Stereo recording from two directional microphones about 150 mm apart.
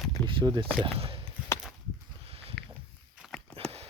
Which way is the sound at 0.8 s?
40° right (ahead or behind).